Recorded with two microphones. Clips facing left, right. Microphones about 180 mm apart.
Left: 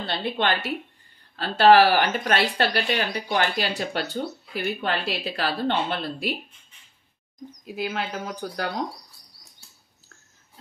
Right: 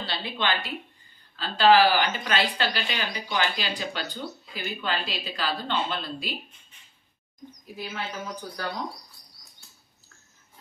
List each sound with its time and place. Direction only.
0.0 s speech: 55° left (ahead or behind)
7.6 s speech: 80° left